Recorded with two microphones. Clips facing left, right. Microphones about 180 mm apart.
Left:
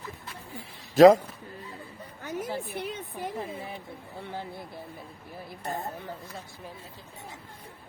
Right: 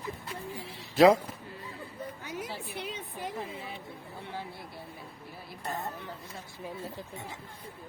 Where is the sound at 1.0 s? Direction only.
45° left (ahead or behind).